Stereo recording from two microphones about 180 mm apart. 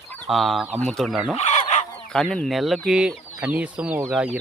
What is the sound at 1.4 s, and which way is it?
Fowl, 40° left (ahead or behind).